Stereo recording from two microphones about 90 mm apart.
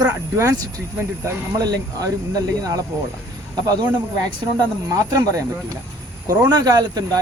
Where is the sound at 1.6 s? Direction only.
45° right (ahead or behind).